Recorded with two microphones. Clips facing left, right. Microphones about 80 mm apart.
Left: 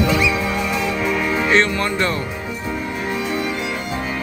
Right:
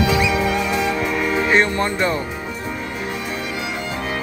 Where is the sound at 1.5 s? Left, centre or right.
Centre.